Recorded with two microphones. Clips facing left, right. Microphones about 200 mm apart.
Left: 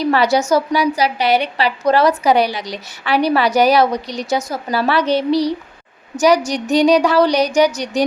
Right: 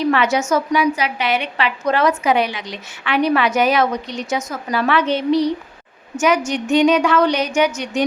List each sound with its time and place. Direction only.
0.0 s a woman's voice: 35° left (ahead or behind)